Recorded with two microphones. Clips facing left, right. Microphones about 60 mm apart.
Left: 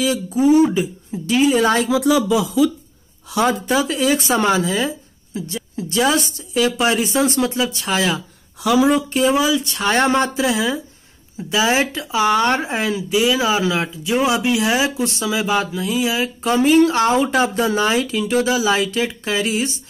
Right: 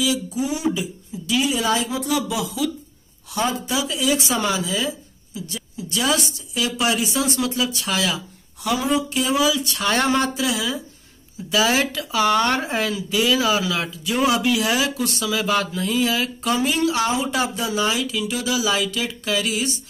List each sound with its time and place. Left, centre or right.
0.0 s speech: left
3.6 s speech: left
15.4 s mantra: centre
16.3 s speech: left